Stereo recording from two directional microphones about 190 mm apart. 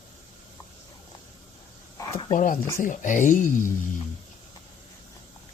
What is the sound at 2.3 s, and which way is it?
Speech, 45° left (ahead or behind).